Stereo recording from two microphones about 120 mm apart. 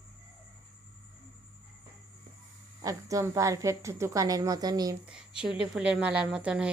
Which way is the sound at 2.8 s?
25° right (ahead or behind).